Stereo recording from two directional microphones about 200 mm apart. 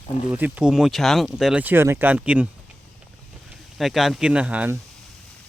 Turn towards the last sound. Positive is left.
turn(degrees=-5)  # may be behind; listen again after turning